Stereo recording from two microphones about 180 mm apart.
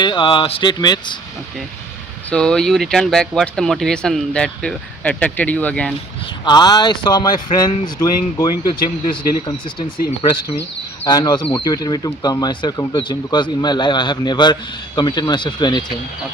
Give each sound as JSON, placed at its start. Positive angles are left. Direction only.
{"t": 0.0, "sound": "speech", "side_deg": 25}
{"t": 2.3, "sound": "speech", "side_deg": 5}
{"t": 6.4, "sound": "speech", "side_deg": 25}
{"t": 11.0, "sound": "speech", "side_deg": 20}